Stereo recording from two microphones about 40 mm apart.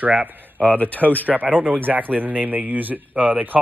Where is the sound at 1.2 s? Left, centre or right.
Right.